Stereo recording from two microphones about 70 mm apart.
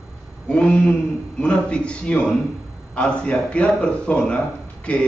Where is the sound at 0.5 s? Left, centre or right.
Centre.